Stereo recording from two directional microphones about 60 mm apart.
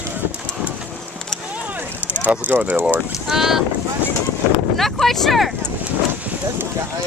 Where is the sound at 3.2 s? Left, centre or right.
Centre.